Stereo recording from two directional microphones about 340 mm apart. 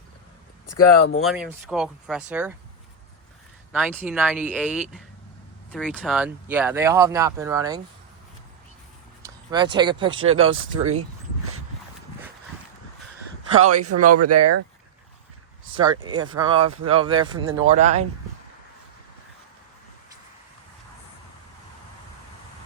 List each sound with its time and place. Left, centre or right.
0.7 s speech: left
1.2 s speech: centre
3.7 s speech: centre
9.2 s speech: centre
10.4 s speech: right
13.6 s speech: right
15.8 s speech: centre